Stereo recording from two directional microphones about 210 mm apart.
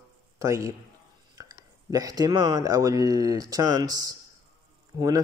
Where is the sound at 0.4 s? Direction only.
15° right (ahead or behind).